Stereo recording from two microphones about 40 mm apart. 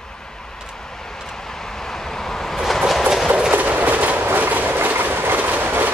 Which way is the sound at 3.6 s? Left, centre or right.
Right.